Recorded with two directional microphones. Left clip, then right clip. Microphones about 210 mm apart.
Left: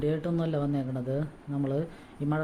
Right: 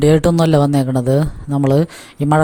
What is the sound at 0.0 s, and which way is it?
Speech, 50° right (ahead or behind).